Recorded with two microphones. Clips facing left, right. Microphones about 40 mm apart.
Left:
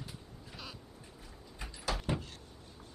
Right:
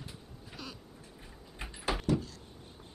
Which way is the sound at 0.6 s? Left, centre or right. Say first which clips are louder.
Right 3 dB; centre.